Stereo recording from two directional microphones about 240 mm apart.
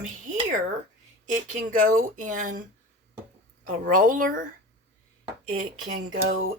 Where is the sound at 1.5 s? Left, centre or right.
Right.